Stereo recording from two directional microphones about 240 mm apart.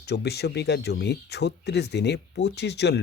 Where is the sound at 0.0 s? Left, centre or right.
Left.